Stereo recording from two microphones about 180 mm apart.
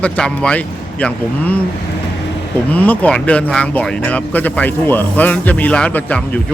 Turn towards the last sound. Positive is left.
turn(degrees=10)  # may be behind; listen again after turning